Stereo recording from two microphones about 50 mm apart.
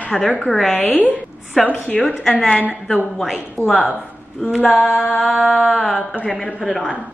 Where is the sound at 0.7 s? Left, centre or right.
Left.